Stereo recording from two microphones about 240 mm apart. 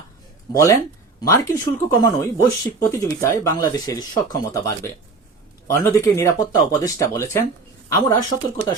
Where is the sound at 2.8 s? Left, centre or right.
Centre.